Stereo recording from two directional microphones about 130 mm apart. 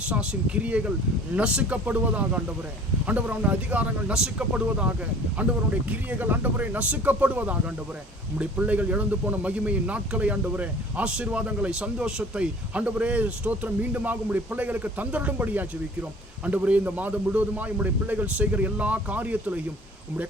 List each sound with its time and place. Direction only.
0.1 s speech: 10° right (ahead or behind)